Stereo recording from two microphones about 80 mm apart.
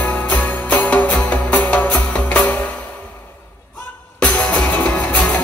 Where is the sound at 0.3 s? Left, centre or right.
Centre.